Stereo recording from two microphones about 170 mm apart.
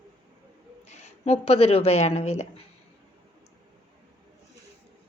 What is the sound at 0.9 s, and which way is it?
Speech, 40° left (ahead or behind).